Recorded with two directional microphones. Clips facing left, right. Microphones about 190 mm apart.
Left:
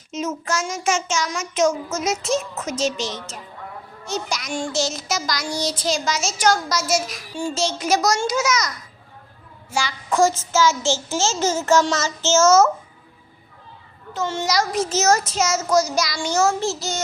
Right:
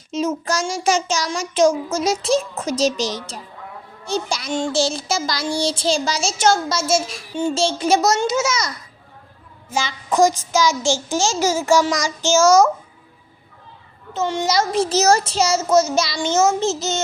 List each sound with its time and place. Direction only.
0.1 s child singing: 30° right (ahead or behind)
4.0 s a child's voice: 30° right (ahead or behind); by 12.7 s 10° right (ahead or behind)
14.1 s a child's voice: 20° right (ahead or behind)